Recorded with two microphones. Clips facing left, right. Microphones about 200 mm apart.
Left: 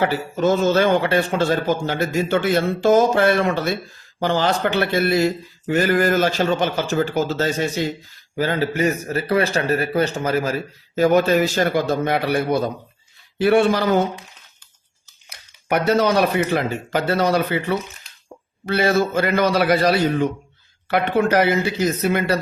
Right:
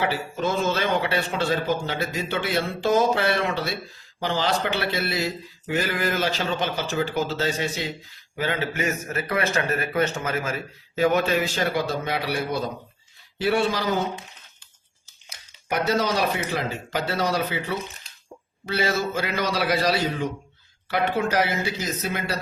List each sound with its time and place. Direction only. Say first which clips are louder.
0.0 s a man's voice: left 6 dB; 45° left (ahead or behind)
15.3 s speech: left 7 dB; 60° left (ahead or behind)